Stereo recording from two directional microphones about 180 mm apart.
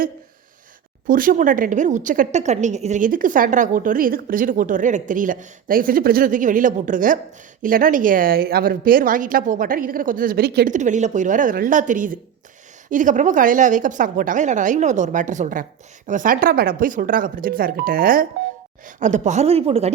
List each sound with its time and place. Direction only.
1.0 s a woman's voice: 50° right (ahead or behind)
10.8 s a woman's voice: 40° right (ahead or behind)
18.9 s a woman's voice: 40° right (ahead or behind)